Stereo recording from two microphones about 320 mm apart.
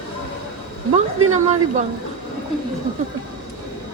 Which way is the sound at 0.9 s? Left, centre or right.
Right.